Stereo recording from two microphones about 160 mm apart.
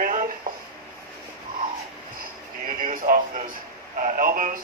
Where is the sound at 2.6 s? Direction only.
60° right (ahead or behind).